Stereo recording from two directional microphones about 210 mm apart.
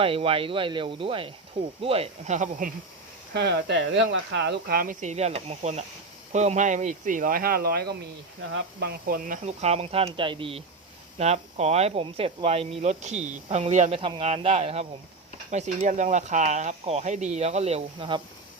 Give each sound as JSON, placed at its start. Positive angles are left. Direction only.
{"t": 0.0, "sound": "speech", "side_deg": -25}
{"t": 3.3, "sound": "speech", "side_deg": -55}